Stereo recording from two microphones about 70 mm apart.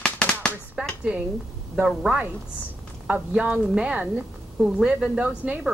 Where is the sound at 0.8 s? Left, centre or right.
Centre.